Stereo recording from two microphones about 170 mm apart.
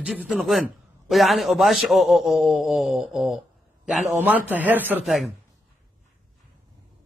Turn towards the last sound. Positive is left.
turn(degrees=0)  # may be behind; listen again after turning